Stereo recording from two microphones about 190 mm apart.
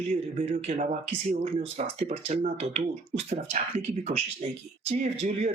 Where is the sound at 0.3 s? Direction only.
40° right (ahead or behind).